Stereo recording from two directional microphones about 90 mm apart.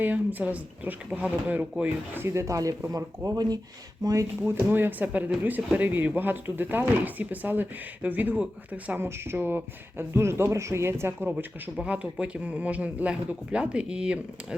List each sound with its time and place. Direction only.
0.0 s speech: 20° right (ahead or behind); by 4.5 s 40° right (ahead or behind)
4.7 s speech: 20° right (ahead or behind)